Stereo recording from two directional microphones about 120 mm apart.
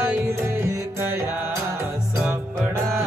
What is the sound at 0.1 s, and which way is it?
Music, 25° right (ahead or behind).